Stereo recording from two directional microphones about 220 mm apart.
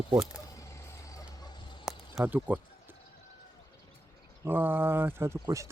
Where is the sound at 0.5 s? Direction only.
15° left (ahead or behind).